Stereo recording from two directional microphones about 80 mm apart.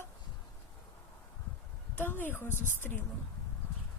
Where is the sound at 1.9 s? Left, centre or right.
Left.